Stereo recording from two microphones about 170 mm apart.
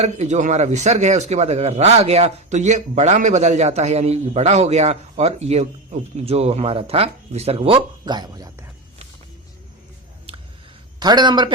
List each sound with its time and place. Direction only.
0.0 s a man's voice: 40° right (ahead or behind); by 8.4 s 25° right (ahead or behind)
11.0 s a man's voice: 25° right (ahead or behind)